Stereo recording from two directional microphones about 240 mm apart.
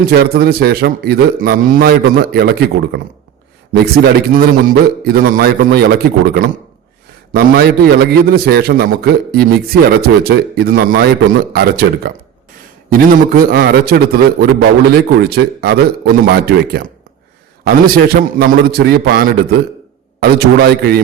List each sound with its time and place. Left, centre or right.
0.1 s a man's voice: right